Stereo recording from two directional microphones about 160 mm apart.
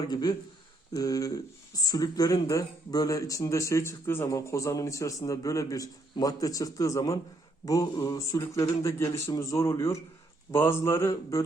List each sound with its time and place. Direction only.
0.1 s speech: 25° left (ahead or behind)